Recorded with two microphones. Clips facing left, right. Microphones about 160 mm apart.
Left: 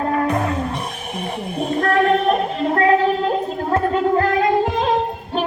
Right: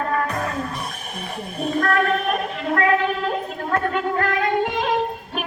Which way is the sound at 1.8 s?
30° left (ahead or behind).